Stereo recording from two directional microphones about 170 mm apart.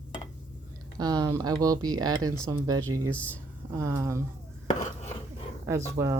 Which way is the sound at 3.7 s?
20° right (ahead or behind).